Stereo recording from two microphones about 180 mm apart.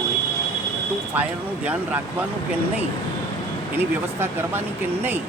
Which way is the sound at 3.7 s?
10° right (ahead or behind).